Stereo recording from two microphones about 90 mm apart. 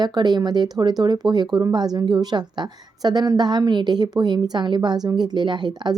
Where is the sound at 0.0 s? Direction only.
50° right (ahead or behind).